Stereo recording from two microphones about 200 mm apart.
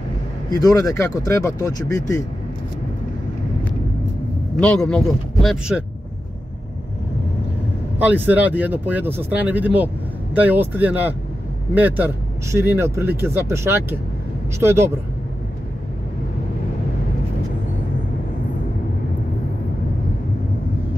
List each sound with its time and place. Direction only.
0.5 s speech: 20° left (ahead or behind)
4.6 s speech: 5° left (ahead or behind)
8.0 s speech: 10° right (ahead or behind)